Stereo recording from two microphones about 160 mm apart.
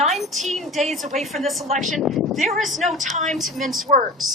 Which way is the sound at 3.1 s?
50° right (ahead or behind).